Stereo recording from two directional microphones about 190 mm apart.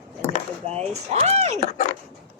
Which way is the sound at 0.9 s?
35° right (ahead or behind).